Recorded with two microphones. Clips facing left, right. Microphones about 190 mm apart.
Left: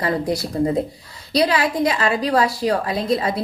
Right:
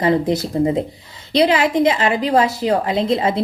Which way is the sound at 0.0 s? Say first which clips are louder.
Right 5 dB; 20° right (ahead or behind).